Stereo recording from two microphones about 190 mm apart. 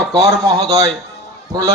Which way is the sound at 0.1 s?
20° right (ahead or behind).